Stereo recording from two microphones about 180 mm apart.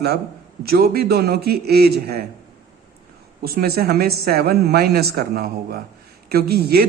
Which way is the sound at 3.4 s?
55° right (ahead or behind).